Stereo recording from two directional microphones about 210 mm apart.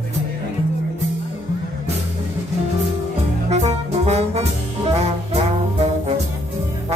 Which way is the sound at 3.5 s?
30° right (ahead or behind).